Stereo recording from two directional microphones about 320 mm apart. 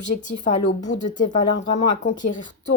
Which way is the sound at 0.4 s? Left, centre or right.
Left.